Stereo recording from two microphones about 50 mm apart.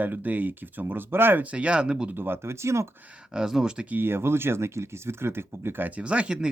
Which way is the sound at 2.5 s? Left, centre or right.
Right.